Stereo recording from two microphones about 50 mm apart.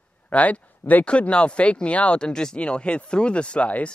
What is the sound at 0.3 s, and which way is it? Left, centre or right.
Speech, left.